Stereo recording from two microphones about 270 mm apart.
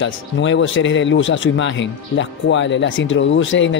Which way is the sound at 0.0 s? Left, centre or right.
Left.